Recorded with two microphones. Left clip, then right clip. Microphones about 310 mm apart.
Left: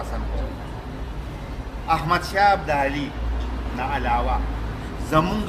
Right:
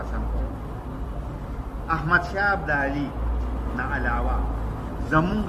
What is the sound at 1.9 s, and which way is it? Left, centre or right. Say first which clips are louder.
Speech: left 1 dB; left.